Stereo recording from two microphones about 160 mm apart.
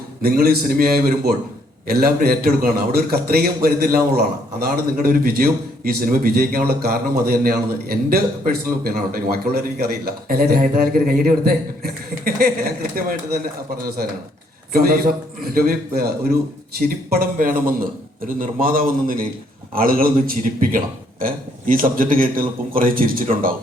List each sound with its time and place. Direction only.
0.2 s a man's voice: 70° right (ahead or behind)
16.7 s a man's voice: 70° right (ahead or behind)